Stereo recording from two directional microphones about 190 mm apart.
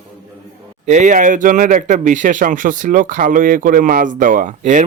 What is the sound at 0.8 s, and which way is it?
Speech, 40° right (ahead or behind).